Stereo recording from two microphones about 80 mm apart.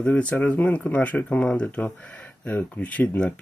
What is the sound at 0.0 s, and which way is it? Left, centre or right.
Speech, centre.